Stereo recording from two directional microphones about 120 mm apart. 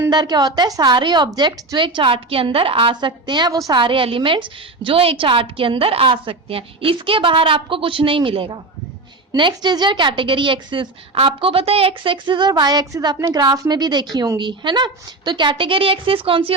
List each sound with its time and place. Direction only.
0.1 s a woman's voice: 35° right (ahead or behind)
3.8 s a woman's voice: 45° right (ahead or behind)